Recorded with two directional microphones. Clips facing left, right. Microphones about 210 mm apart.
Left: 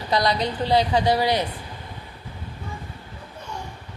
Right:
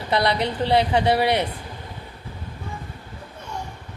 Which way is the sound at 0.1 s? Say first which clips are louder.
Right 1 dB; 25° right (ahead or behind).